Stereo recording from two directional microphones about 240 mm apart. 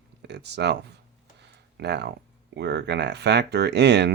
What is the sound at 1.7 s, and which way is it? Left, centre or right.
Speech, right.